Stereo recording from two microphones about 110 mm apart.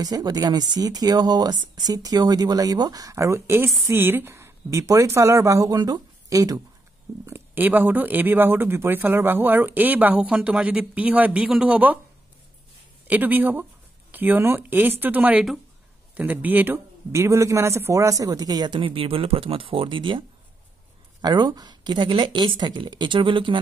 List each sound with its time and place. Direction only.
0.0 s a woman's voice: 35° right (ahead or behind)
7.2 s speech: 20° right (ahead or behind)
13.0 s speech: 15° right (ahead or behind); by 20.2 s 50° right (ahead or behind)
21.2 s a woman's voice: 40° right (ahead or behind)